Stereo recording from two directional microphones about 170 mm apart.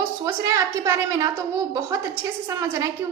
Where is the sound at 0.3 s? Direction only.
20° right (ahead or behind).